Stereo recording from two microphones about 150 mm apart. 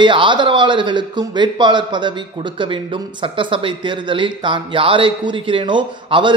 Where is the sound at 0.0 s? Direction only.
30° right (ahead or behind).